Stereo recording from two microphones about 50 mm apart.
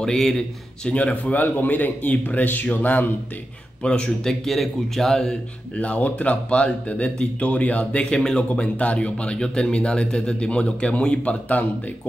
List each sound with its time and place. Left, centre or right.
0.0 s speech: centre
0.8 s a man's voice: left
3.8 s a man's voice: centre
4.3 s speech: centre
5.8 s a man's voice: left
8.5 s a man's voice: left